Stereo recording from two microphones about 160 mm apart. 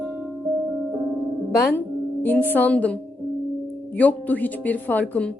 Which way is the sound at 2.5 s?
10° left (ahead or behind).